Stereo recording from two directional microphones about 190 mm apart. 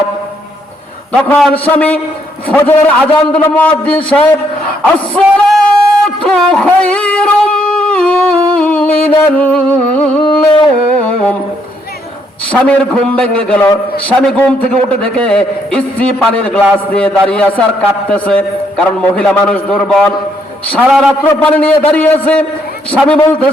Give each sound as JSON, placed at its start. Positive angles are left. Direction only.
{"t": 1.3, "sound": "a man's voice", "side_deg": 5}
{"t": 6.2, "sound": "a sound", "side_deg": 5}
{"t": 10.2, "sound": "carnatic music", "side_deg": 30}
{"t": 12.5, "sound": "a man's voice", "side_deg": 5}